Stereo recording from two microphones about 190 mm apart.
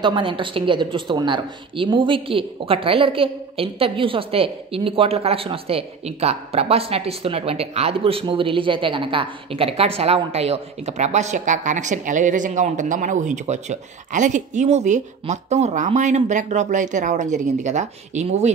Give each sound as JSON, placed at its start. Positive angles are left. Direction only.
{"t": 0.0, "sound": "a woman's voice", "side_deg": -25}